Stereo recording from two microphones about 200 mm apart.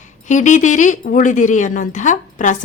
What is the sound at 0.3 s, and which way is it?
A woman's voice, 40° left (ahead or behind).